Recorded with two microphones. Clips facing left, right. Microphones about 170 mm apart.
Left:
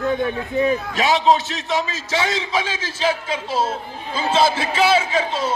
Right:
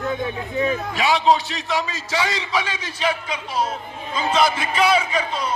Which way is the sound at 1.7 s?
25° left (ahead or behind).